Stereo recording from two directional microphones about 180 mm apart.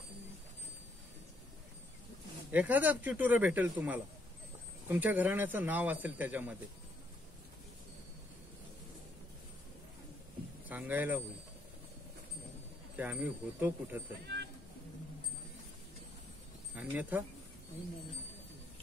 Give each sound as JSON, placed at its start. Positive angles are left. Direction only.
{"t": 2.5, "sound": "a man's voice", "side_deg": -10}
{"t": 10.7, "sound": "a man's voice", "side_deg": -10}
{"t": 12.9, "sound": "a man's voice", "side_deg": -10}
{"t": 14.2, "sound": "a sound", "side_deg": -70}
{"t": 16.7, "sound": "a man's voice", "side_deg": -10}